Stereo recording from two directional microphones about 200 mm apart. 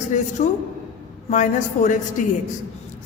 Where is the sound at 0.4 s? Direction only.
35° left (ahead or behind).